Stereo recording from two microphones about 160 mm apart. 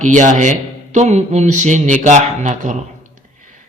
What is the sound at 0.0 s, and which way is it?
A woman's voice, 50° right (ahead or behind).